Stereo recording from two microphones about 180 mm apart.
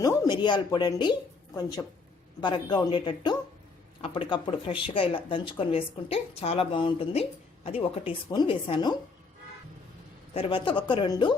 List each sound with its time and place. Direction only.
0.0 s speech: 20° left (ahead or behind)
2.4 s speech: 25° left (ahead or behind)
10.3 s speech: 30° left (ahead or behind)